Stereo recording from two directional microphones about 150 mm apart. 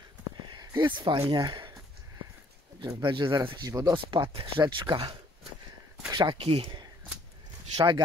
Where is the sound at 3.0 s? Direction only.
35° right (ahead or behind).